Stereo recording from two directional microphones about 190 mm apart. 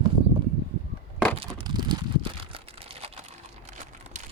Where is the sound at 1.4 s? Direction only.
25° right (ahead or behind).